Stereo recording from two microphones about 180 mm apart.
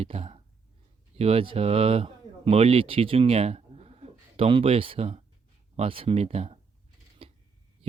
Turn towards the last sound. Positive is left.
turn(degrees=-30)  # may be behind; listen again after turning